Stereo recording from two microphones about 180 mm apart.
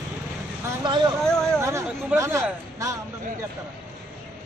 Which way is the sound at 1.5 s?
15° right (ahead or behind).